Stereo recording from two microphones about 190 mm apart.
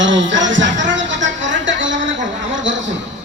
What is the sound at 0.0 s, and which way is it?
Music, 75° right (ahead or behind).